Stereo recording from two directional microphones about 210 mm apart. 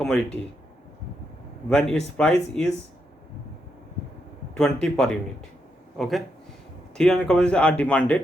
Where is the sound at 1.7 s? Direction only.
5° left (ahead or behind).